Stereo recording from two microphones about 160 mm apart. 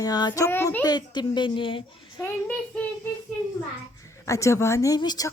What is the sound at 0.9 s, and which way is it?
A child's voice, 25° left (ahead or behind).